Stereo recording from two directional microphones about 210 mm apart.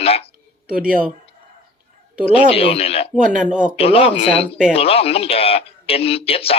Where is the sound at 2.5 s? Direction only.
25° left (ahead or behind).